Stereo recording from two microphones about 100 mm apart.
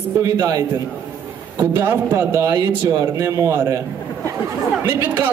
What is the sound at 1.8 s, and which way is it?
Speech, 25° right (ahead or behind).